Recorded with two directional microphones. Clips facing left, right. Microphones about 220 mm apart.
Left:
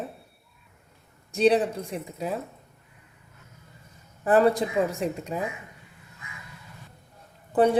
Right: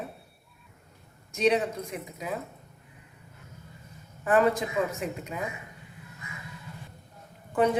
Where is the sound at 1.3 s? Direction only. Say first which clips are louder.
Left 4 dB; 35° left (ahead or behind).